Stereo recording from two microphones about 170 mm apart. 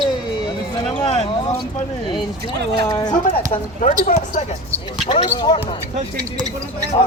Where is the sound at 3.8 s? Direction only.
50° left (ahead or behind).